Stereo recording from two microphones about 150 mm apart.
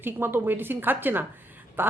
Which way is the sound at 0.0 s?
15° right (ahead or behind).